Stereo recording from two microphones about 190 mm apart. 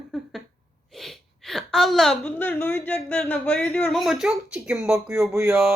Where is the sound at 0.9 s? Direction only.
Centre (ahead or behind).